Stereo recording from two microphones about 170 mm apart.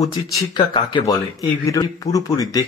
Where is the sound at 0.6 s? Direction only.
25° left (ahead or behind).